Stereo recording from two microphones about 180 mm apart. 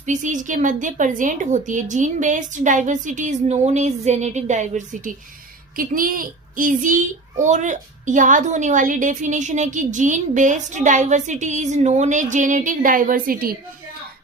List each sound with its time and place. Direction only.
0.0 s a child's voice: 45° right (ahead or behind)